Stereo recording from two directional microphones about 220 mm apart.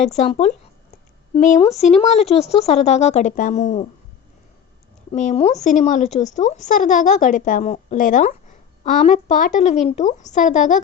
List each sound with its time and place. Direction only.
0.1 s a woman's voice: 30° left (ahead or behind)
5.1 s a woman's voice: 30° left (ahead or behind)